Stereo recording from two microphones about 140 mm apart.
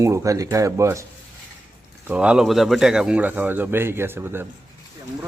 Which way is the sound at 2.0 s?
10° right (ahead or behind).